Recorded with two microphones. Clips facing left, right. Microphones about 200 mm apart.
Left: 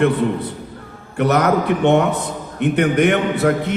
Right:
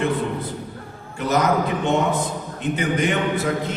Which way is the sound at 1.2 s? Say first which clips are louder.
Left 4 dB; 65° left (ahead or behind).